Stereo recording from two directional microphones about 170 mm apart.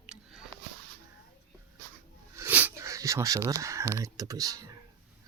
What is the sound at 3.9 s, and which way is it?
Speech, 20° right (ahead or behind).